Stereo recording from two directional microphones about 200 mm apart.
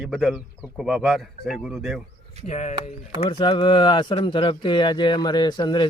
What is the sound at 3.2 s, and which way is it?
Speech, 25° left (ahead or behind).